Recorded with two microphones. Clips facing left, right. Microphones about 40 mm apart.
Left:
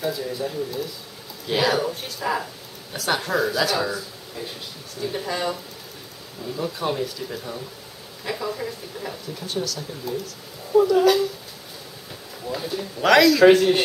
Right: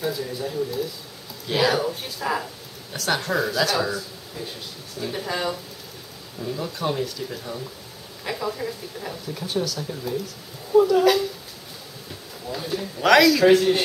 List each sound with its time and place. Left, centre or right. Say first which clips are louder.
0.0 s speech: left 1 dB; centre
12.6 s speech: even; centre
13.6 s speech: left 1 dB; centre